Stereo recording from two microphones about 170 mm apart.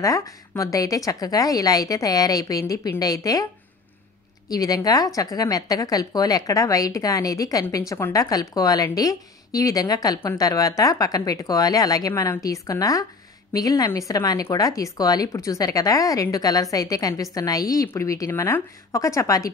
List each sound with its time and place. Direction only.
0.0 s a woman's voice: 20° left (ahead or behind)
4.5 s a woman's voice: 20° left (ahead or behind)